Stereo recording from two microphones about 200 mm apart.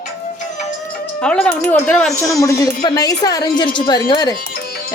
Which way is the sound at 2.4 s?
15° left (ahead or behind).